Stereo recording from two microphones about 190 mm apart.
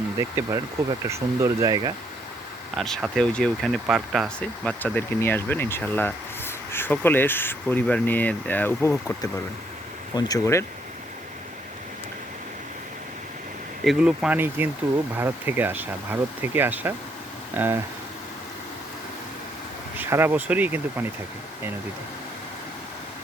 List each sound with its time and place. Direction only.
0.2 s speech: 15° right (ahead or behind)
2.7 s speech: centre (ahead or behind)
13.8 s speech: 5° right (ahead or behind)
20.0 s speech: 10° right (ahead or behind)